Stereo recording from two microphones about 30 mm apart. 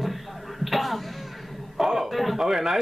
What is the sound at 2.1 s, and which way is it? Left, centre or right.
Speech, centre.